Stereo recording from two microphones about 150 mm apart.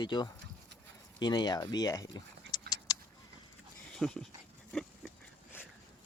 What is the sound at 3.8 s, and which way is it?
Dog, 5° left (ahead or behind).